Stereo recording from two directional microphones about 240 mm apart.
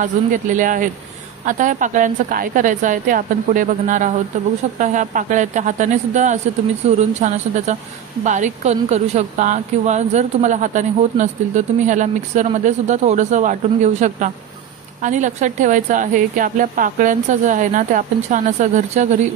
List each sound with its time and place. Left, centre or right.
0.0 s a woman's voice: right